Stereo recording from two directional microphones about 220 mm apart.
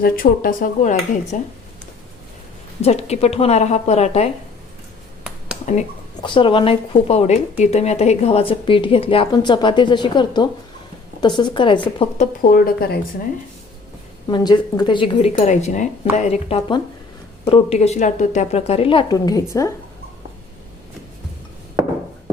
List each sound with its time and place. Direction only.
0.0 s speech: 40° left (ahead or behind)
2.8 s a woman's voice: 30° left (ahead or behind)
5.7 s speech: 35° left (ahead or behind)
6.2 s a woman's voice: 20° left (ahead or behind); by 13.0 s 45° left (ahead or behind)
14.3 s a woman's voice: 20° left (ahead or behind)